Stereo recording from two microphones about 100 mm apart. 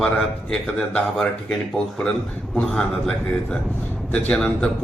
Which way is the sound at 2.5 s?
5° left (ahead or behind).